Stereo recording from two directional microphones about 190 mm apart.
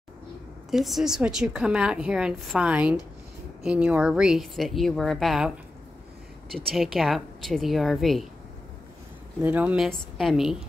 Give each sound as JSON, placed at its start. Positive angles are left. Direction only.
{"t": 0.7, "sound": "a woman's voice", "side_deg": 0}
{"t": 6.5, "sound": "a woman's voice", "side_deg": 0}
{"t": 9.4, "sound": "a woman's voice", "side_deg": -5}